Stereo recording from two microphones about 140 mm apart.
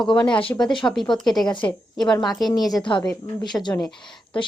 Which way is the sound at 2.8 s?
35° left (ahead or behind).